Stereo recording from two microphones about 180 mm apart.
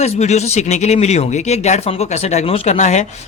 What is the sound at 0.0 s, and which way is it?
Speech, 40° left (ahead or behind).